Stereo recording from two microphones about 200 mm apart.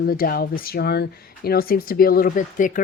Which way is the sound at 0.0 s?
50° left (ahead or behind).